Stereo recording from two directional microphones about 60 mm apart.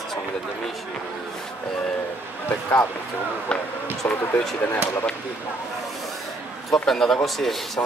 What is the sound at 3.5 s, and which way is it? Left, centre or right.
Speech, centre.